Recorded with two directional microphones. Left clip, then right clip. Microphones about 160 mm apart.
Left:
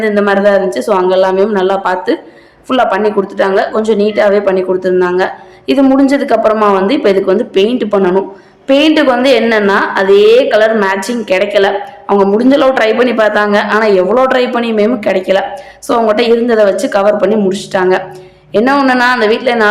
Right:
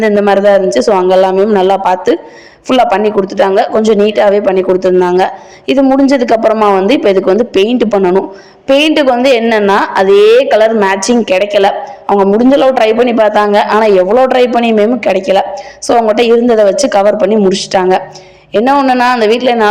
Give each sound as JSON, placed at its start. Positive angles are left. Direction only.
{"t": 0.0, "sound": "a woman's voice", "side_deg": -35}
{"t": 5.8, "sound": "a woman's voice", "side_deg": -25}
{"t": 6.5, "sound": "a man's voice", "side_deg": -25}
{"t": 6.8, "sound": "a woman's voice", "side_deg": -35}
{"t": 12.0, "sound": "a man's voice", "side_deg": -20}